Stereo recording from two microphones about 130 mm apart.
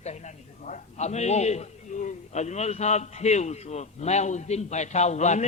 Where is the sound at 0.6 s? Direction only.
65° left (ahead or behind).